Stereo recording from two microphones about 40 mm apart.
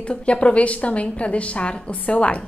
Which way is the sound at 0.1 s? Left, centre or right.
Left.